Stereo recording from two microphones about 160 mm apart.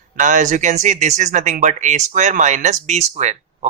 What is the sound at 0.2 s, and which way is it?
Speech, 50° right (ahead or behind).